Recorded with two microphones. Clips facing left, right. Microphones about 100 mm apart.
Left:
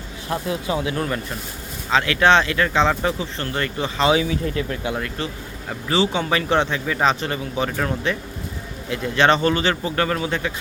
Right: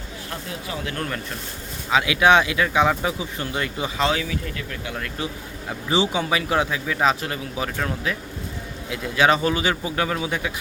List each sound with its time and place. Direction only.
0.3 s speech: 20° left (ahead or behind)
0.9 s a man's voice: 5° left (ahead or behind)
1.9 s speech: 10° right (ahead or behind)
4.1 s speech: 25° left (ahead or behind)
5.9 s a man's voice: 15° right (ahead or behind)